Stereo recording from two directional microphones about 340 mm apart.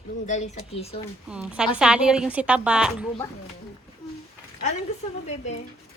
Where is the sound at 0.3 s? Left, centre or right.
Centre.